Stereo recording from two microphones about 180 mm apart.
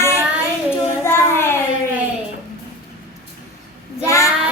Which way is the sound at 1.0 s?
15° left (ahead or behind).